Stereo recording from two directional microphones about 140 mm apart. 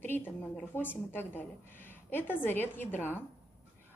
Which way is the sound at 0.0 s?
15° left (ahead or behind).